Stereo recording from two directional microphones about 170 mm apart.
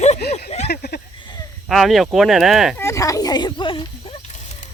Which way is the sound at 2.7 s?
15° left (ahead or behind).